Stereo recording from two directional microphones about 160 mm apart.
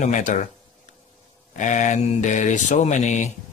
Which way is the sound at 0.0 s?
50° left (ahead or behind).